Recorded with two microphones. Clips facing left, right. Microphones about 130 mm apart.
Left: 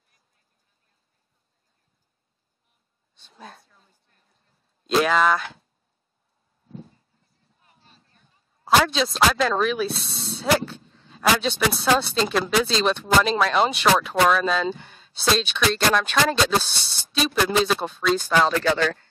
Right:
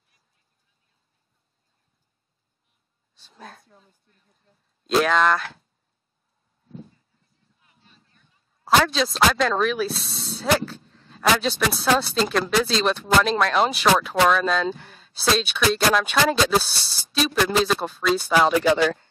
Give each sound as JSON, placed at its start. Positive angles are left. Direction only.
{"t": 3.2, "sound": "speech", "side_deg": 0}
{"t": 4.8, "sound": "speech", "side_deg": 0}
{"t": 7.6, "sound": "a sound", "side_deg": 40}
{"t": 8.6, "sound": "speech", "side_deg": 0}